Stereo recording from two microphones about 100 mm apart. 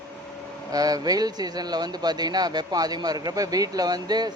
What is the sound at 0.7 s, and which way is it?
Speech, 40° right (ahead or behind).